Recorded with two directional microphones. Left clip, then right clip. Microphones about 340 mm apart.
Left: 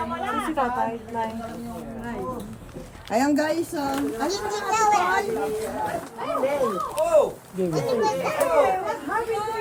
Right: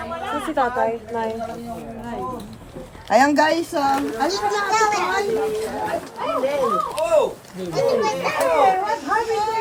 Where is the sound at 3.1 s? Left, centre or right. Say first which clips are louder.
Right 7 dB; centre.